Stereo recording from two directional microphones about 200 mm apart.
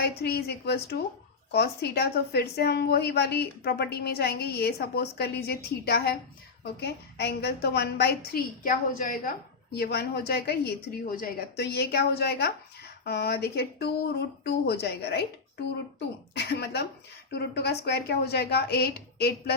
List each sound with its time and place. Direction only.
0.0 s a woman's voice: 55° left (ahead or behind)
9.7 s a woman's voice: 55° left (ahead or behind)